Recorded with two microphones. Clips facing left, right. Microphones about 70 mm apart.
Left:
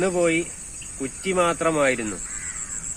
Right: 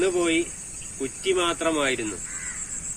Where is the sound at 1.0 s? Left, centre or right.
Left.